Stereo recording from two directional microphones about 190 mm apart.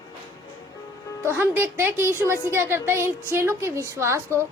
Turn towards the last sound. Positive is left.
turn(degrees=-15)  # may be behind; listen again after turning